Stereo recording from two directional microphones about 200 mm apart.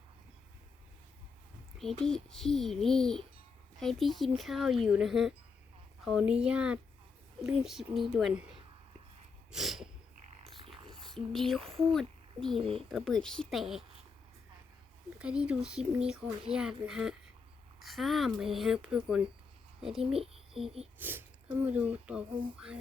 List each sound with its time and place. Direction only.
1.8 s speech: centre (ahead or behind)
9.5 s sneeze: centre (ahead or behind)
11.0 s speech: centre (ahead or behind)
11.6 s speech: 30° right (ahead or behind)
11.9 s a sound: centre (ahead or behind)
12.5 s speech: 25° right (ahead or behind)
12.9 s speech: centre (ahead or behind)
15.2 s a child's voice: 5° right (ahead or behind)
20.1 s speech: 30° right (ahead or behind)
20.5 s speech: centre (ahead or behind)